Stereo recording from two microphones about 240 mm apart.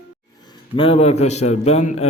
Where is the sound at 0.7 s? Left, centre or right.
Left.